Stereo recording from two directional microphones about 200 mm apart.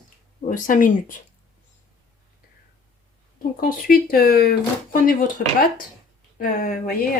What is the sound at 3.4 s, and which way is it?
Speech, 45° left (ahead or behind).